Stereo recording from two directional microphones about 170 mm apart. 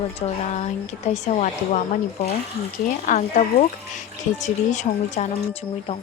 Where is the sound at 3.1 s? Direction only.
45° left (ahead or behind).